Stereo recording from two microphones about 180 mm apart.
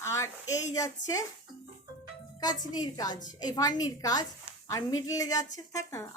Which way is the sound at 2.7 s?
20° left (ahead or behind).